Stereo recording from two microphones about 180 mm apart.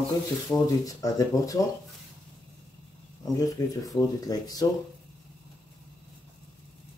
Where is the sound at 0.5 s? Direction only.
20° left (ahead or behind).